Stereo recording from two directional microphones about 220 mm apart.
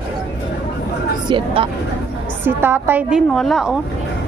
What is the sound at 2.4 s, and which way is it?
A woman's voice, 10° right (ahead or behind).